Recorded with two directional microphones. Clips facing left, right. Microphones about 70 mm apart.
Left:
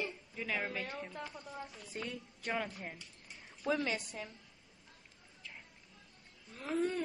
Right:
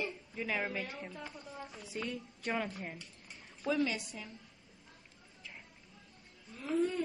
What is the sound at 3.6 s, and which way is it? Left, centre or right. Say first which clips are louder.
Speech: right 2 dB; left.